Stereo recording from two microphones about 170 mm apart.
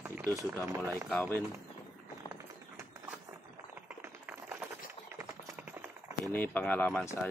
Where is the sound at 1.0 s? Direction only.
5° left (ahead or behind).